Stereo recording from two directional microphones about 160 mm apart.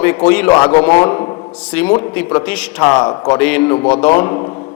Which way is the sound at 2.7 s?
25° left (ahead or behind).